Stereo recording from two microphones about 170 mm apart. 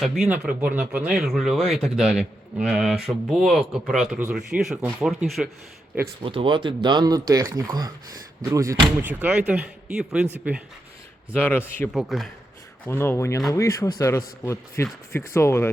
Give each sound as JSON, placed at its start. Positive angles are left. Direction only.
{"t": 0.0, "sound": "speech", "side_deg": 0}
{"t": 6.2, "sound": "speech", "side_deg": -30}
{"t": 11.3, "sound": "speech", "side_deg": 10}
{"t": 11.9, "sound": "speech", "side_deg": 0}
{"t": 12.9, "sound": "speech", "side_deg": 15}